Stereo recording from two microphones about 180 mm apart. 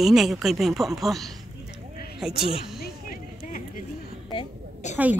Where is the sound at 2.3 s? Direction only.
30° left (ahead or behind).